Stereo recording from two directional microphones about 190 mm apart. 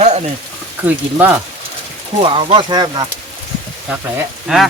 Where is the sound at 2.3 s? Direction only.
25° right (ahead or behind).